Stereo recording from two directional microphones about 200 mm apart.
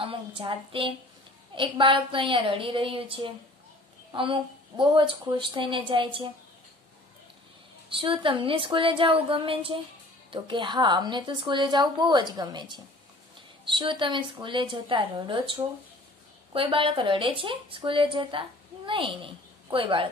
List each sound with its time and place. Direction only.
0.0 s a woman's voice: 25° right (ahead or behind)
7.9 s a woman's voice: 25° right (ahead or behind)